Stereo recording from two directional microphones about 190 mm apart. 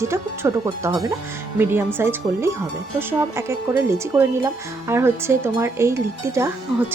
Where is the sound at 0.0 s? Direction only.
15° right (ahead or behind).